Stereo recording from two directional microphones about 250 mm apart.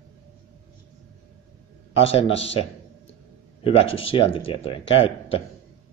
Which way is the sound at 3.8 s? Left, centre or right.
Left.